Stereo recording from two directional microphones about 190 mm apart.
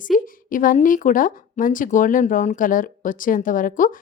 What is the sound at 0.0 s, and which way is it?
A woman's voice, 45° left (ahead or behind).